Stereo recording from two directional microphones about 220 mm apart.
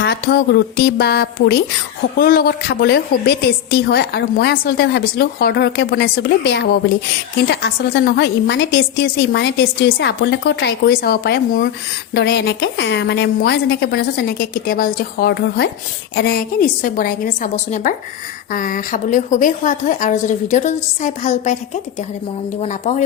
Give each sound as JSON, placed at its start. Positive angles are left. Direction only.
{"t": 0.0, "sound": "a woman's voice", "side_deg": 45}
{"t": 22.6, "sound": "a woman's voice", "side_deg": 30}